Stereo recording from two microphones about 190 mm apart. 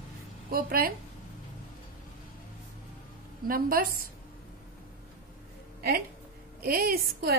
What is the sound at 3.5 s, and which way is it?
Speech, 50° right (ahead or behind).